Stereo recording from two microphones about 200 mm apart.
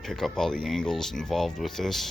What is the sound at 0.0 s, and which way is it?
Speech, centre (ahead or behind).